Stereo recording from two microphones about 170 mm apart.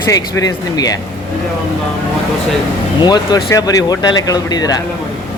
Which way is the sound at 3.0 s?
25° left (ahead or behind).